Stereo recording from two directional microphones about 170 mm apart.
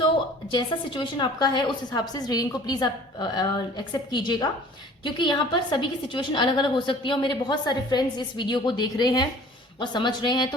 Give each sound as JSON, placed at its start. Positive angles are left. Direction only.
{"t": 0.5, "sound": "a woman's voice", "side_deg": 30}